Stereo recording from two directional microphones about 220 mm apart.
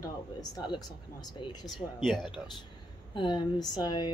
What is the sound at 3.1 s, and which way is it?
Speech, 20° left (ahead or behind).